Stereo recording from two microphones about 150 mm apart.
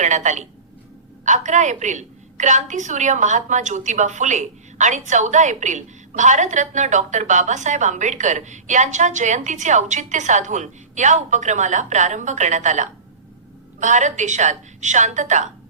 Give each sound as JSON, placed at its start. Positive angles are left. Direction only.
{"t": 0.0, "sound": "a woman's voice", "side_deg": -50}